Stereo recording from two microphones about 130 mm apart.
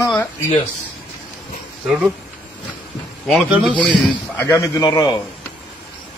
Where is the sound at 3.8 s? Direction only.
10° left (ahead or behind).